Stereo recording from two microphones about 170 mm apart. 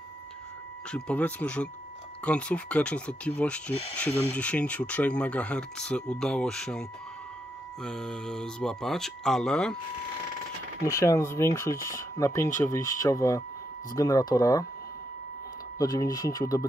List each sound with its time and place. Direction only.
0.9 s speech: 5° left (ahead or behind)
10.8 s speech: 20° left (ahead or behind)
15.8 s speech: 20° left (ahead or behind)